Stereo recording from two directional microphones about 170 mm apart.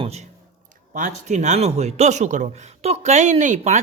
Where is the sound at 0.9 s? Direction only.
45° right (ahead or behind).